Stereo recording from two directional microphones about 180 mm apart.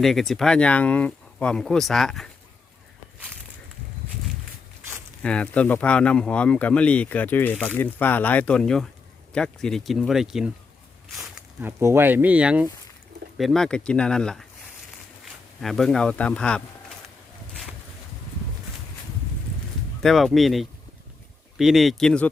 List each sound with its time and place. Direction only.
0.0 s speech: centre (ahead or behind)
5.2 s speech: 5° left (ahead or behind)
11.2 s speech: 15° right (ahead or behind); by 16.6 s 5° left (ahead or behind)
20.0 s speech: centre (ahead or behind)